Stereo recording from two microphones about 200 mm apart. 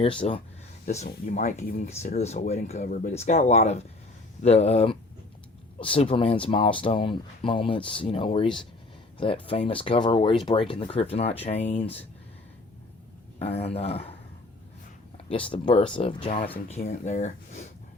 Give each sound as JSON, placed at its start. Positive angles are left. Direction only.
{"t": 0.0, "sound": "speech", "side_deg": 25}
{"t": 1.0, "sound": "speech", "side_deg": 40}
{"t": 2.1, "sound": "speech", "side_deg": 35}
{"t": 13.4, "sound": "speech", "side_deg": 30}
{"t": 15.4, "sound": "speech", "side_deg": 25}